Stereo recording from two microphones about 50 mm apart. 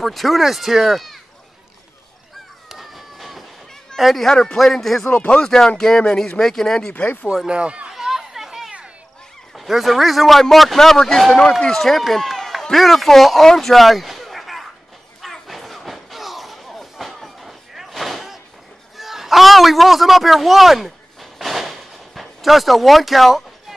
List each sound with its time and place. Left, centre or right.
0.0 s a man's voice: centre
2.7 s a sound: centre
3.9 s speech: centre
4.3 s a man's voice: centre
5.1 s speech: left
5.4 s speech: centre
7.4 s speech: right
7.9 s chatter: centre
9.6 s a man's voice: centre
13.6 s a sound: centre